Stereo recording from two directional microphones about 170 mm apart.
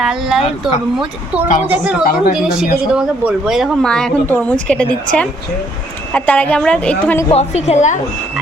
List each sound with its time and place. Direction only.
0.0 s a woman's voice: 5° right (ahead or behind)
7.3 s a woman's voice: 40° left (ahead or behind)